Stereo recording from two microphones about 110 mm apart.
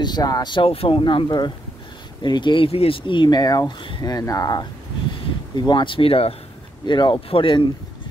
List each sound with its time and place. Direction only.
0.0 s speech: 35° left (ahead or behind)
0.7 s speech: 55° left (ahead or behind)
6.9 s speech: 45° left (ahead or behind)